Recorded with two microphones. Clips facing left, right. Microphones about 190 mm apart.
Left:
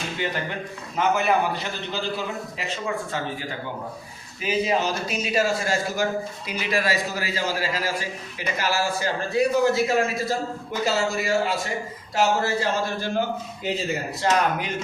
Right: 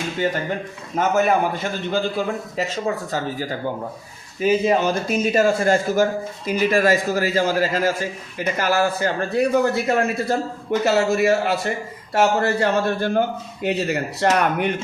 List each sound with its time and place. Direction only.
0.9 s a man's voice: 45° right (ahead or behind); by 14.7 s 65° right (ahead or behind)